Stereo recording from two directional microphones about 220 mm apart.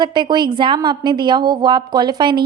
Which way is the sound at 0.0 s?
20° right (ahead or behind).